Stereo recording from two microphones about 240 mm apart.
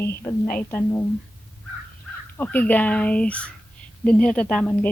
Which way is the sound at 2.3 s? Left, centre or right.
Centre.